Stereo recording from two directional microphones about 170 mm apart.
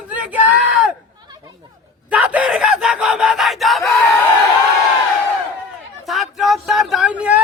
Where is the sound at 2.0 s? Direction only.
10° right (ahead or behind).